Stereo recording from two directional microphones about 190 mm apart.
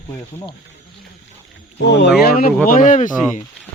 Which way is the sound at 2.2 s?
50° left (ahead or behind).